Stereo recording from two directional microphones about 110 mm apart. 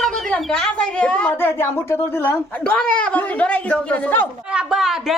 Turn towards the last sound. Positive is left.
turn(degrees=-5)  # may be behind; listen again after turning